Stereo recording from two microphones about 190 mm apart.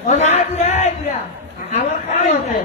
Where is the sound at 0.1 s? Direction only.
35° left (ahead or behind).